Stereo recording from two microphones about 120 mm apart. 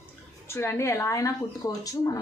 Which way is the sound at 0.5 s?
25° left (ahead or behind).